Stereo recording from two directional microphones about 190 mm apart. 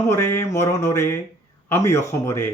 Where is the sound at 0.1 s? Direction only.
15° left (ahead or behind).